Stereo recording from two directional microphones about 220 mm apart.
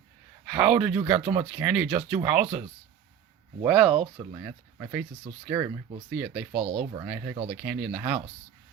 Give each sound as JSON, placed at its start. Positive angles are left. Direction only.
{"t": 0.5, "sound": "speech", "side_deg": -5}
{"t": 0.9, "sound": "speech", "side_deg": -25}
{"t": 1.3, "sound": "speech", "side_deg": -5}
{"t": 3.7, "sound": "speech", "side_deg": 0}
{"t": 4.2, "sound": "speech", "side_deg": -15}
{"t": 6.1, "sound": "speech", "side_deg": -5}
{"t": 6.6, "sound": "speech", "side_deg": -25}
{"t": 7.0, "sound": "speech", "side_deg": -10}
{"t": 7.5, "sound": "speech", "side_deg": -5}